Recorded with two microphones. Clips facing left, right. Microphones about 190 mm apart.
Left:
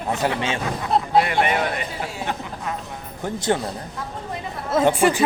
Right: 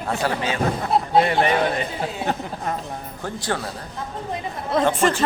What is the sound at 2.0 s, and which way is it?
Speech, 40° right (ahead or behind).